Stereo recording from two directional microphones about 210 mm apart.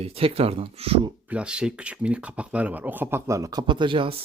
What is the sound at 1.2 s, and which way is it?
Speech, 5° right (ahead or behind).